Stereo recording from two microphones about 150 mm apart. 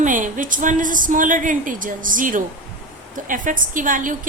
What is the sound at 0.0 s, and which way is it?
A woman's voice, 60° right (ahead or behind).